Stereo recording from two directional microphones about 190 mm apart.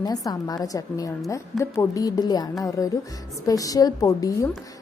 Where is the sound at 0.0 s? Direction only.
20° left (ahead or behind).